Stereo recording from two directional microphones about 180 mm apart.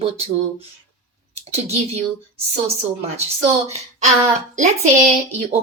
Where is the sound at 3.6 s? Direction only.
35° right (ahead or behind).